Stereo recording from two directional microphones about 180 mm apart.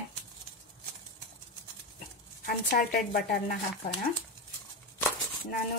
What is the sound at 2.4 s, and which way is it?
Speech, 50° left (ahead or behind).